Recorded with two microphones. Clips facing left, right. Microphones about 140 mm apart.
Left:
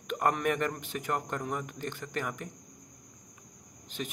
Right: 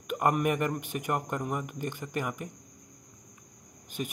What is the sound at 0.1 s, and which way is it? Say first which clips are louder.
Speech: right 2 dB; 10° right (ahead or behind).